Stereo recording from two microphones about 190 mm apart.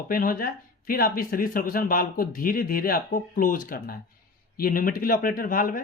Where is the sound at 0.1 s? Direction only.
50° left (ahead or behind).